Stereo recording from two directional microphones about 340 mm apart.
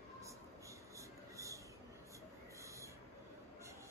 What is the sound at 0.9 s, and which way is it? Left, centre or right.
Writing, centre.